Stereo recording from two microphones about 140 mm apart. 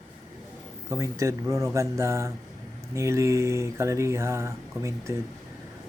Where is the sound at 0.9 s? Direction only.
20° right (ahead or behind).